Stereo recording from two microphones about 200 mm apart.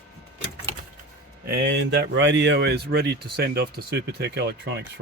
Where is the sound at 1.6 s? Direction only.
60° right (ahead or behind).